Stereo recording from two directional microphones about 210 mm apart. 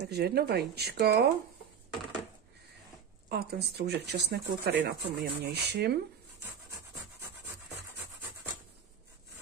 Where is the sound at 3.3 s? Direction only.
50° right (ahead or behind).